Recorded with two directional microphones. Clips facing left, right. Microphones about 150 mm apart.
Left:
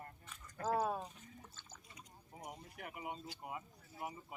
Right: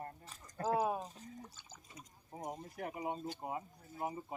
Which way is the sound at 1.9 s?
40° right (ahead or behind).